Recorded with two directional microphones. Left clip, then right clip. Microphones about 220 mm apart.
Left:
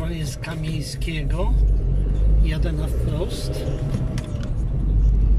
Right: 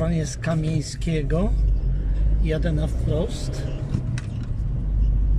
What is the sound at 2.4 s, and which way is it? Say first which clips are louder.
Speech: right 6 dB; 30° right (ahead or behind).